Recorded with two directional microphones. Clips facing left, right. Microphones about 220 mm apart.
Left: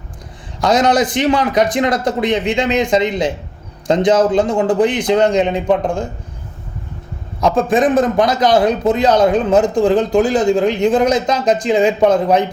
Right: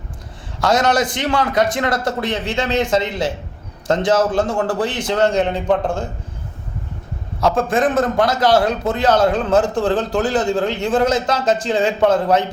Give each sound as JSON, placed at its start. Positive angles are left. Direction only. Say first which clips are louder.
{"t": 0.6, "sound": "a man's voice", "louder": "left 3 dB", "side_deg": 20}
{"t": 7.4, "sound": "a man's voice", "louder": "left 3 dB", "side_deg": 15}